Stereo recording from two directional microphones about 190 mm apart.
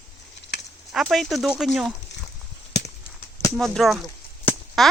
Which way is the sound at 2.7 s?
65° left (ahead or behind).